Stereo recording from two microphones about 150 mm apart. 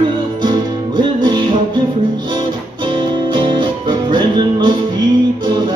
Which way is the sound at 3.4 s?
30° right (ahead or behind).